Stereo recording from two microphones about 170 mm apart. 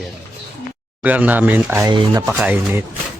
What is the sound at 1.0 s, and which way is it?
Speech, 10° right (ahead or behind).